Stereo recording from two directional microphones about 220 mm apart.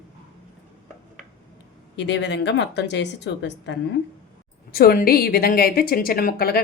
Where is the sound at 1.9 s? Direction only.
50° left (ahead or behind).